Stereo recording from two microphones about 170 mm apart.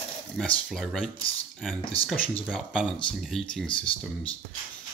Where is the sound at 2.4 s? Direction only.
5° right (ahead or behind).